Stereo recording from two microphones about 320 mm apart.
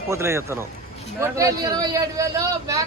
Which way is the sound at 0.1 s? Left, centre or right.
Centre.